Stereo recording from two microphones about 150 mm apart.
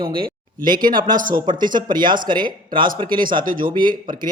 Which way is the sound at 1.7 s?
30° right (ahead or behind).